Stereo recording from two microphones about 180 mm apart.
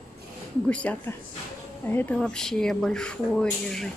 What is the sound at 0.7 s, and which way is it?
Speech, 5° left (ahead or behind).